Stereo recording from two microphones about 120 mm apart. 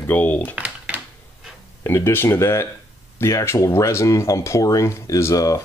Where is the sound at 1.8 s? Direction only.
20° left (ahead or behind).